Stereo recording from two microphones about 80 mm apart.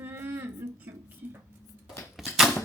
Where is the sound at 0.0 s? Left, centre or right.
Right.